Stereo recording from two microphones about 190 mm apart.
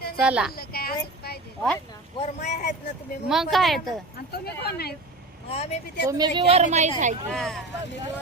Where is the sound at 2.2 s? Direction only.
40° left (ahead or behind).